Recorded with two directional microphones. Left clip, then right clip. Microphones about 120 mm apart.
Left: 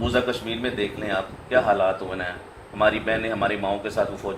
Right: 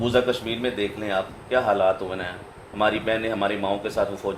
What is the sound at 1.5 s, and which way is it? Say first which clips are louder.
Speech: even; 90° right.